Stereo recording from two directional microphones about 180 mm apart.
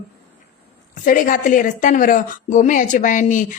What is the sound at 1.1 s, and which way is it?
A woman's voice, 45° left (ahead or behind).